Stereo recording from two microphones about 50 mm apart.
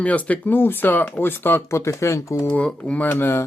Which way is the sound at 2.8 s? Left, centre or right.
Left.